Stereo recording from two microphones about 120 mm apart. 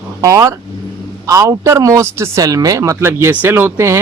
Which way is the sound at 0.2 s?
30° right (ahead or behind).